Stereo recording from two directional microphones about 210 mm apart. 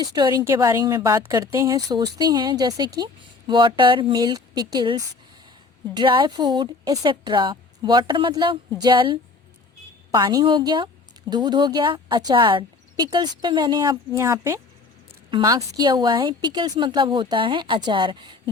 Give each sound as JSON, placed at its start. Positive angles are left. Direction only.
{"t": 0.0, "sound": "a woman's voice", "side_deg": -20}